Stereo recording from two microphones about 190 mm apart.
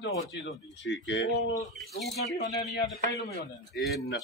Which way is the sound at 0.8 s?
70° left (ahead or behind).